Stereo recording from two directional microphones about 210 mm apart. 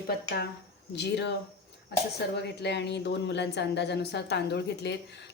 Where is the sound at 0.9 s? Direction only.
55° left (ahead or behind).